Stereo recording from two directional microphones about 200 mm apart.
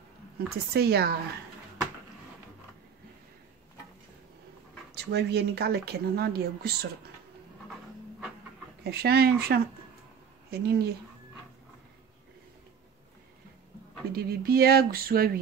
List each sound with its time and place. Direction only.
0.5 s speech: 50° right (ahead or behind)
4.9 s speech: 55° right (ahead or behind)
8.8 s speech: 55° right (ahead or behind)
14.1 s speech: 50° right (ahead or behind)